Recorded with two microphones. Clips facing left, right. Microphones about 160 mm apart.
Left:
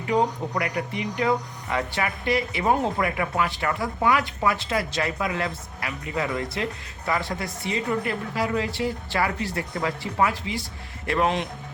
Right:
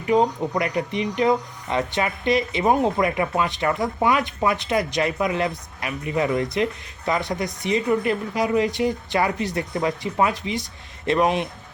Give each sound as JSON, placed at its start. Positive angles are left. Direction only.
{"t": 0.1, "sound": "speech", "side_deg": -20}